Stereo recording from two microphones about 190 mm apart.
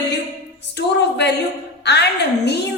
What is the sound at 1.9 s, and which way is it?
Speech, 60° left (ahead or behind).